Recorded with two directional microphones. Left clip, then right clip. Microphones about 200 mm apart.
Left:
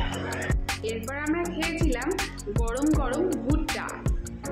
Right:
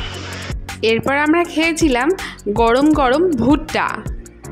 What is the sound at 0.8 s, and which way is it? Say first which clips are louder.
Speech: right 17 dB; 60° right (ahead or behind).